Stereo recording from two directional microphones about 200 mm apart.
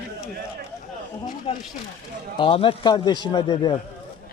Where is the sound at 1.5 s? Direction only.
30° left (ahead or behind).